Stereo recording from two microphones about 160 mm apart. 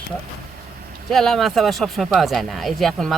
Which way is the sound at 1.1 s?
Centre (ahead or behind).